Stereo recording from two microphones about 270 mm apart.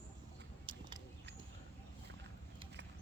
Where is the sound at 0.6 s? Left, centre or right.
Centre.